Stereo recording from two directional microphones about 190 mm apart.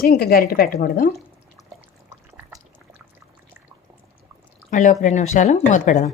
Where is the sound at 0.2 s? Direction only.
50° left (ahead or behind).